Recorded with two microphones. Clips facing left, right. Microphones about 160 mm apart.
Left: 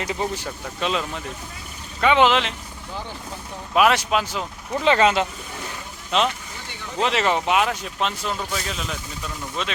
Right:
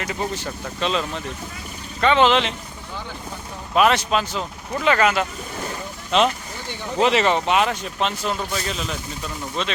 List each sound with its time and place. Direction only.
0.0 s speech: 15° left (ahead or behind)
3.8 s speech: 5° left (ahead or behind)
4.8 s speech: 25° left (ahead or behind)
6.1 s speech: 5° left (ahead or behind)